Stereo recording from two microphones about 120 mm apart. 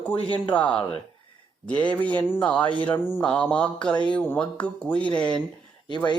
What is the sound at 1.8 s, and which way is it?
Speech, 10° left (ahead or behind).